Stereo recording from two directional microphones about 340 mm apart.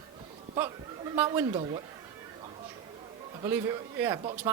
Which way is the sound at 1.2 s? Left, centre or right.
Centre.